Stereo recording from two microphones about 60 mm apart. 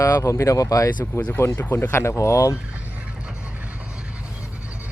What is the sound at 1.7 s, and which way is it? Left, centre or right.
Speech, left.